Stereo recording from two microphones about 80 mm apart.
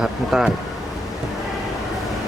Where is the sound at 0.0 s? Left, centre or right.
Centre.